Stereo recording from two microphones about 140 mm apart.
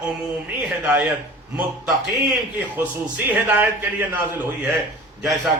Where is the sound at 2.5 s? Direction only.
10° right (ahead or behind).